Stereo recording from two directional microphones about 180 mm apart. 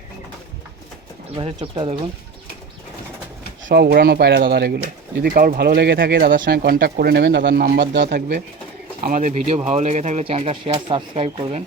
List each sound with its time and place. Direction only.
1.4 s speech: 25° right (ahead or behind)
3.7 s speech: 65° right (ahead or behind)
5.2 s speech: 55° right (ahead or behind); by 8.4 s 70° right (ahead or behind)
9.0 s speech: 45° right (ahead or behind)